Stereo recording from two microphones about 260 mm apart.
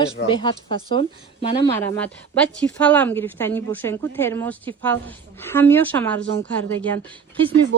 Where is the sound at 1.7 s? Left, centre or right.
Centre.